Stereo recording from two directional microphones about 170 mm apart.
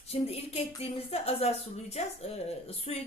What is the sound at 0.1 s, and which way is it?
Speech, 35° left (ahead or behind).